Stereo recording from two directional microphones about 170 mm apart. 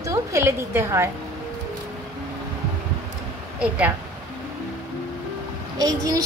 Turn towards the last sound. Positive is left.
turn(degrees=-20)  # may be behind; listen again after turning